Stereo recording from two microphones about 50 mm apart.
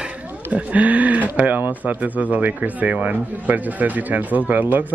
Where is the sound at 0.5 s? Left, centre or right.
Right.